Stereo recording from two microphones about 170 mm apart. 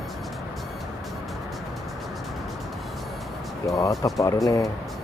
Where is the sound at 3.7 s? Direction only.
20° left (ahead or behind).